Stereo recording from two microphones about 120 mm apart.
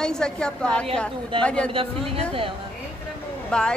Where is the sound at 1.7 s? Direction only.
50° right (ahead or behind).